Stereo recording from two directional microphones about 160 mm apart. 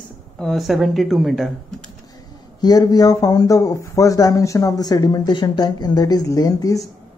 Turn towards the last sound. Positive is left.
turn(degrees=20)  # may be behind; listen again after turning